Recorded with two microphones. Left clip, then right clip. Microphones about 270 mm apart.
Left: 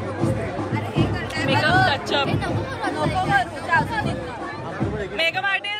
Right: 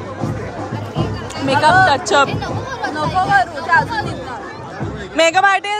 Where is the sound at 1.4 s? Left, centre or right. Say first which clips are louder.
Right 8 dB; right.